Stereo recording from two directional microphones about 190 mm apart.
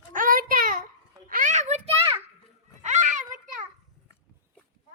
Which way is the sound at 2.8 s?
40° right (ahead or behind).